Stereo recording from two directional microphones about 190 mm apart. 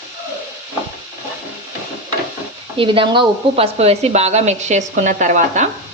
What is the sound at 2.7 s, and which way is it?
Speech, 25° right (ahead or behind).